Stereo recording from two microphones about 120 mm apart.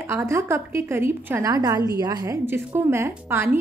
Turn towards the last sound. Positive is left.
turn(degrees=-20)  # may be behind; listen again after turning